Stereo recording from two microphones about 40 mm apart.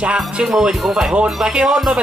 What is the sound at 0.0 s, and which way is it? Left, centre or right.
Speech, right.